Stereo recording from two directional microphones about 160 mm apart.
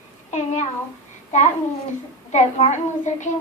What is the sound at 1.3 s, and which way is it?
Child singing, 45° left (ahead or behind).